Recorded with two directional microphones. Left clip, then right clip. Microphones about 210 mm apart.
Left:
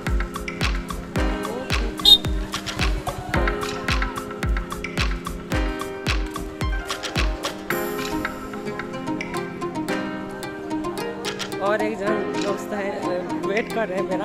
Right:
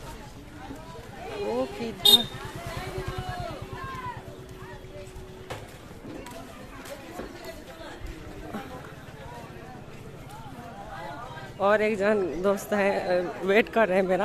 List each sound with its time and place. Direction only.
2.0 s music: 15° left (ahead or behind)
11.6 s speech: 10° right (ahead or behind)